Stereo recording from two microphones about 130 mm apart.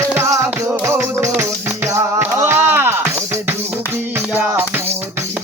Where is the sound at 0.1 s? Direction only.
20° right (ahead or behind).